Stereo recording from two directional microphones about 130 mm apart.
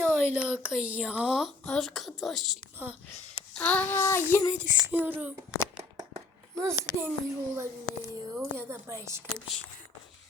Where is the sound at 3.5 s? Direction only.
10° left (ahead or behind).